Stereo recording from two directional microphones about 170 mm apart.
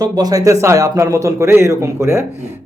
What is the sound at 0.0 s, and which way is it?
A man's voice, 20° right (ahead or behind).